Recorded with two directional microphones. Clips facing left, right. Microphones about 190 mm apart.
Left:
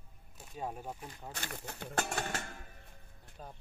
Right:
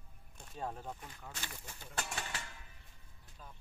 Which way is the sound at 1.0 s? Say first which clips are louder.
Left 4 dB; 35° left (ahead or behind).